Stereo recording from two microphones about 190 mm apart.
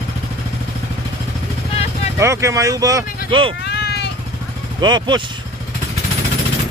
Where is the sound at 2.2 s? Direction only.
15° right (ahead or behind).